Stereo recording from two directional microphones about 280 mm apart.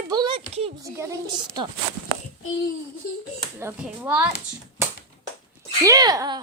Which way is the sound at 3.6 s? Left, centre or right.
Centre.